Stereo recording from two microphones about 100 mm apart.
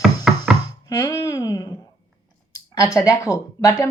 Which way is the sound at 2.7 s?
30° left (ahead or behind).